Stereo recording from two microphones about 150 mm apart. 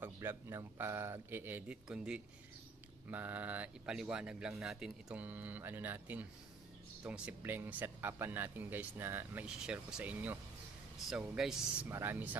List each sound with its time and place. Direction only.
0.0 s speech: 15° right (ahead or behind)